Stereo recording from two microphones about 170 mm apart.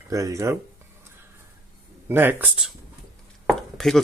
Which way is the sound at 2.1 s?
10° right (ahead or behind).